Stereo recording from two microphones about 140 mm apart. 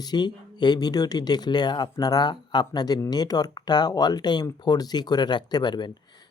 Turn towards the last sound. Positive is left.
turn(degrees=30)  # may be behind; listen again after turning